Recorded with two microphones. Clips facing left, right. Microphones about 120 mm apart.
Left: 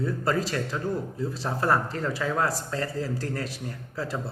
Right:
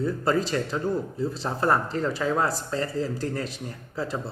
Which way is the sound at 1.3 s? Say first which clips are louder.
Right 1 dB; centre (ahead or behind).